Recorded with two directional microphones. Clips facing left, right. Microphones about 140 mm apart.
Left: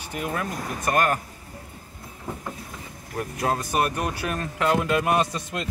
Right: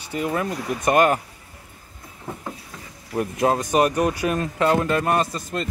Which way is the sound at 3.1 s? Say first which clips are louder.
Right 6 dB; 15° right (ahead or behind).